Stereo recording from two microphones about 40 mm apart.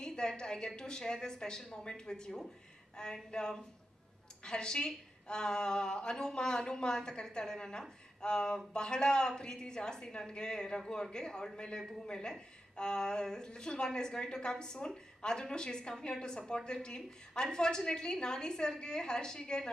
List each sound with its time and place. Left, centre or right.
0.0 s a woman's voice: centre